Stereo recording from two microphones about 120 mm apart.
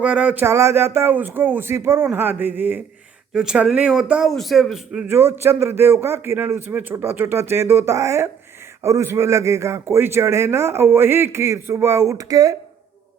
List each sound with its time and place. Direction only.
0.0 s speech: 10° right (ahead or behind)
0.4 s speech: 25° right (ahead or behind)
3.3 s speech: 5° right (ahead or behind)
5.0 s a man's voice: 20° right (ahead or behind)